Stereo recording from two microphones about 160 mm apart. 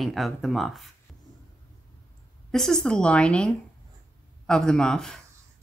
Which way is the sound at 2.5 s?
Centre (ahead or behind).